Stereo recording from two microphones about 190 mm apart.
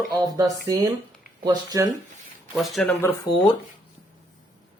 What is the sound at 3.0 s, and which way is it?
Speech, 10° left (ahead or behind).